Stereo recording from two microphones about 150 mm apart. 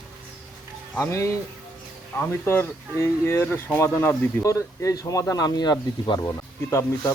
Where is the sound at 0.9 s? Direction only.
15° left (ahead or behind).